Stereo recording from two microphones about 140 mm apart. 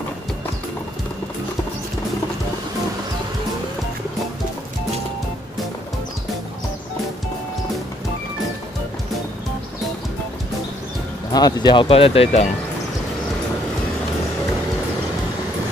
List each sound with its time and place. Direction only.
11.3 s speech: 30° left (ahead or behind); by 12.4 s 45° left (ahead or behind)